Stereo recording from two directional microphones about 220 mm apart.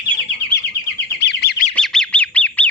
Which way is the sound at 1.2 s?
50° left (ahead or behind).